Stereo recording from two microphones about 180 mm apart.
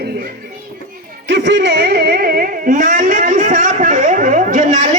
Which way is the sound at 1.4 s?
80° right.